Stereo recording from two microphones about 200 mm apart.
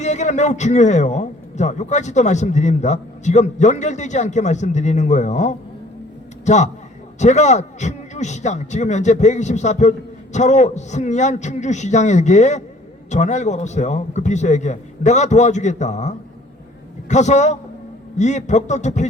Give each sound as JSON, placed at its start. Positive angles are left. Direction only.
{"t": 0.0, "sound": "a man's voice", "side_deg": 35}